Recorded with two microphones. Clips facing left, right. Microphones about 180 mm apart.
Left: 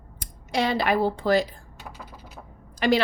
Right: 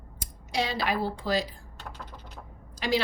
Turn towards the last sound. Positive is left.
turn(degrees=60)  # may be behind; listen again after turning